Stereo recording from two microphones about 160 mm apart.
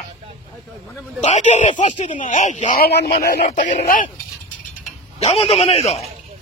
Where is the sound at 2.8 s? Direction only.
90° left.